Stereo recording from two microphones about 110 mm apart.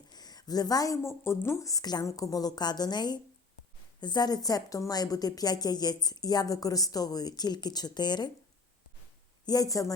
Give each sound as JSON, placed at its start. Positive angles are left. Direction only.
{"t": 0.1, "sound": "a woman's voice", "side_deg": 35}
{"t": 9.5, "sound": "a woman's voice", "side_deg": 35}